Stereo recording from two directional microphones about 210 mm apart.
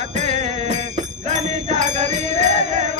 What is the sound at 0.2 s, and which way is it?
Music, 35° right (ahead or behind).